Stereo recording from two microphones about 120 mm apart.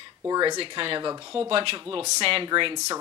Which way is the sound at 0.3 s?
35° right (ahead or behind).